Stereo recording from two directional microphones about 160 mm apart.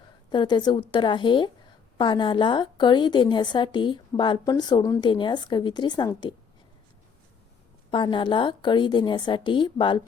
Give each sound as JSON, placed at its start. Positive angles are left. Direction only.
{"t": 0.3, "sound": "a woman's voice", "side_deg": 30}
{"t": 7.9, "sound": "a woman's voice", "side_deg": 30}